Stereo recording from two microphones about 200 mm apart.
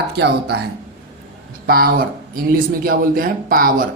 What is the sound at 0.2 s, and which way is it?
Speech, 55° right (ahead or behind).